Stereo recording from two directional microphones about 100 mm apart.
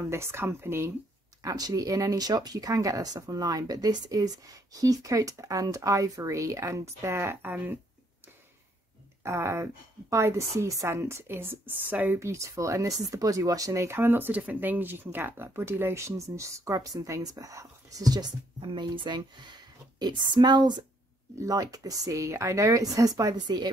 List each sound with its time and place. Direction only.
0.0 s speech: 25° right (ahead or behind)
1.4 s a woman's voice: 40° right (ahead or behind); by 7.8 s 20° right (ahead or behind)
9.2 s a woman's voice: 30° right (ahead or behind)